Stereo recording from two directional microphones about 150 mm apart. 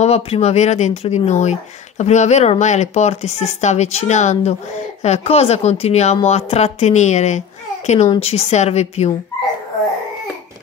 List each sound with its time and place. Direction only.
0.0 s speech: 45° left (ahead or behind)